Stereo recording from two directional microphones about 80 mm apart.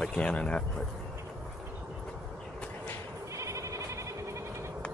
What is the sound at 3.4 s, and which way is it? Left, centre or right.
Sheep, right.